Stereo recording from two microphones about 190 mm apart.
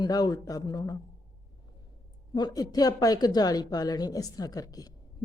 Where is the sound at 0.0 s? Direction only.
20° left (ahead or behind).